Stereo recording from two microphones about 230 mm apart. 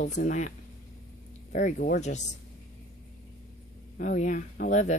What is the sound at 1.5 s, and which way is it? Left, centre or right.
Speech, left.